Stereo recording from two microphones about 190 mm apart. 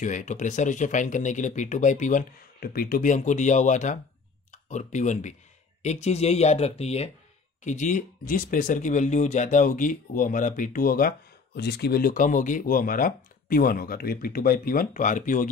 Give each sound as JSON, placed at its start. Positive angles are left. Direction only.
{"t": 0.0, "sound": "speech", "side_deg": 40}